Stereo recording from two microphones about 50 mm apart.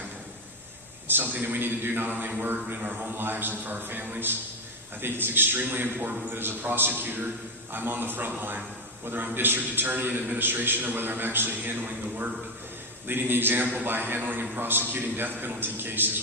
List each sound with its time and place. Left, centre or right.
1.0 s a man's voice: right